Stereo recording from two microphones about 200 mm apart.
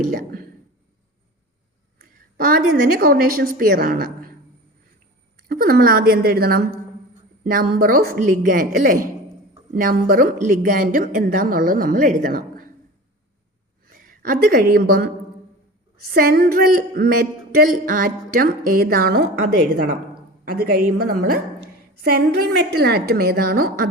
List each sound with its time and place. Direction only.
0.1 s speech: 45° right (ahead or behind)
2.0 s a sound: 45° right (ahead or behind)
3.0 s speech: 50° right (ahead or behind)
5.4 s speech: 45° right (ahead or behind)
13.9 s a woman's voice: 45° right (ahead or behind)
16.1 s speech: 50° right (ahead or behind)
20.4 s speech: 50° right (ahead or behind)